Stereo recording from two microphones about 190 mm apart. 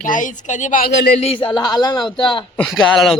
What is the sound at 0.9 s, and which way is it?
Speech, 65° left (ahead or behind).